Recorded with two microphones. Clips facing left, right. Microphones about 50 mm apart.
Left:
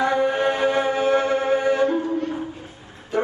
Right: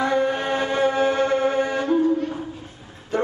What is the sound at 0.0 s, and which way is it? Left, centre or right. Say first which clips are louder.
Music: left 2 dB; centre.